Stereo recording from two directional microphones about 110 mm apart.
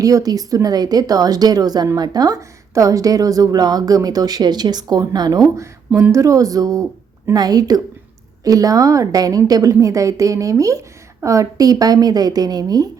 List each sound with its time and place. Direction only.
0.0 s a woman's voice: 35° right (ahead or behind)
5.9 s a woman's voice: 25° right (ahead or behind)